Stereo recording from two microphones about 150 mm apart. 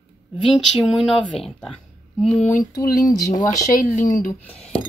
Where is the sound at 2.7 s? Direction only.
25° left (ahead or behind).